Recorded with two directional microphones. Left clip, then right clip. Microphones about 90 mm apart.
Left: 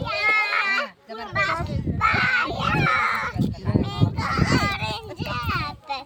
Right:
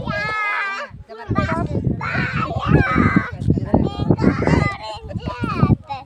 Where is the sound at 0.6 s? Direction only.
40° right (ahead or behind).